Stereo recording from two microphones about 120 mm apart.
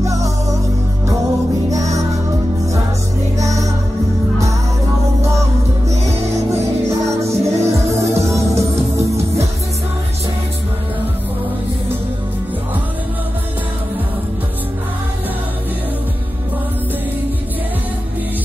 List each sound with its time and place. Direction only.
0.0 s music: 25° right (ahead or behind)
1.7 s music: 25° right (ahead or behind)
3.3 s music: 25° right (ahead or behind)
6.9 s music: 25° right (ahead or behind)